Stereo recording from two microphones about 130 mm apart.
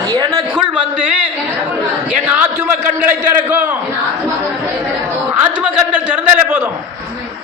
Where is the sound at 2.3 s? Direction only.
10° right (ahead or behind).